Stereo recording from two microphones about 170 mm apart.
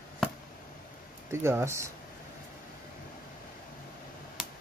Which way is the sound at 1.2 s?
15° right (ahead or behind).